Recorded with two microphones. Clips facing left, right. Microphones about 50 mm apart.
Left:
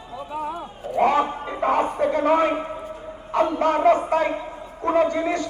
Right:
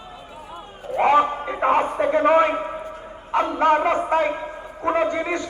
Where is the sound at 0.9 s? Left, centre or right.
Right.